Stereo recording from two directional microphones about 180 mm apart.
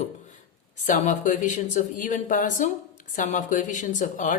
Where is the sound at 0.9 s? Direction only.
45° left (ahead or behind).